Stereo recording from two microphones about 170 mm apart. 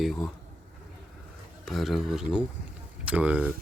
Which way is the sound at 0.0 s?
Centre (ahead or behind).